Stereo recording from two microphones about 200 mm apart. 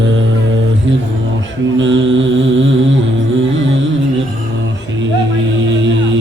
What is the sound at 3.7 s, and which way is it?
Music, 70° right (ahead or behind).